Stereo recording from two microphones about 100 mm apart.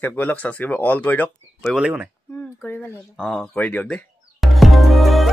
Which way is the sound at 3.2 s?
5° left (ahead or behind).